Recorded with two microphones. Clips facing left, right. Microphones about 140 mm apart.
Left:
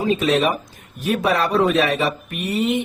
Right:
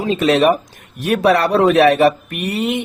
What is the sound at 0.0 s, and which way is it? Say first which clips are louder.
A man's voice: right 4 dB; 75° right (ahead or behind).